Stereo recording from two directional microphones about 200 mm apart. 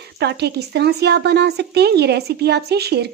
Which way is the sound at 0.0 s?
55° right (ahead or behind).